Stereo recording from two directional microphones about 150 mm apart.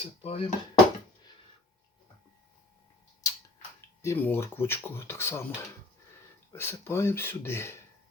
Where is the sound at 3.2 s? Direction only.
25° left (ahead or behind).